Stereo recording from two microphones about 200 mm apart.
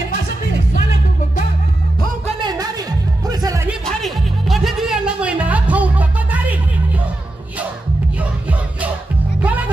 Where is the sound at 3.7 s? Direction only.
Centre (ahead or behind).